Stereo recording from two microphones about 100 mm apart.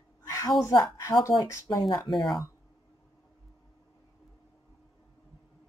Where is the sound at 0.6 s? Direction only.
40° left (ahead or behind).